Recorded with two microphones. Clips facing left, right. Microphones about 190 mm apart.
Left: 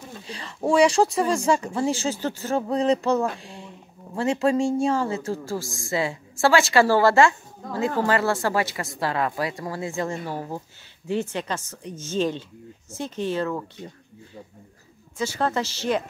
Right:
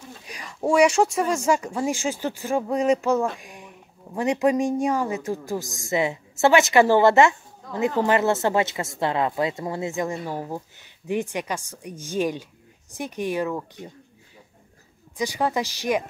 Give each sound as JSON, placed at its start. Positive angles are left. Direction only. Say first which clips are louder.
{"t": 0.2, "sound": "speech", "louder": "even", "side_deg": -15}
{"t": 0.8, "sound": "speech", "louder": "even", "side_deg": 35}
{"t": 1.4, "sound": "speech", "louder": "even", "side_deg": -10}
{"t": 3.3, "sound": "a sound", "louder": "left 3 dB", "side_deg": -15}
{"t": 4.2, "sound": "a woman's voice", "louder": "right 1 dB", "side_deg": -15}
{"t": 15.1, "sound": "speech", "louder": "right 1 dB", "side_deg": -15}